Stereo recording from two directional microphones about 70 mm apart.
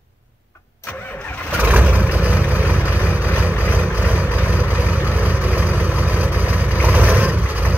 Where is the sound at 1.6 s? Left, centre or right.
Right.